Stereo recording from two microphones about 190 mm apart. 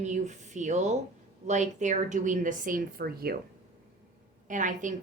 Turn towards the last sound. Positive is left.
turn(degrees=-40)  # may be behind; listen again after turning